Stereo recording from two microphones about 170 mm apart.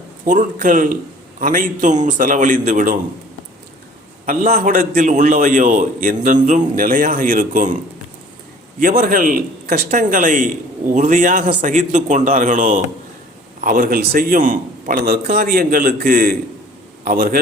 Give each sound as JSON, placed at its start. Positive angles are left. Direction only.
{"t": 0.3, "sound": "a man's voice", "side_deg": -50}
{"t": 4.3, "sound": "a man's voice", "side_deg": -60}
{"t": 8.8, "sound": "a man's voice", "side_deg": -55}